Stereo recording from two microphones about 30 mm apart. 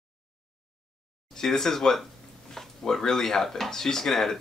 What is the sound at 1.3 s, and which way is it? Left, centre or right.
Speech, centre.